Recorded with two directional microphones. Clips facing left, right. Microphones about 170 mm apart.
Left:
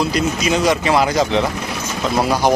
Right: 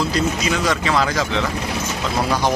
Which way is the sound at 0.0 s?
15° left (ahead or behind).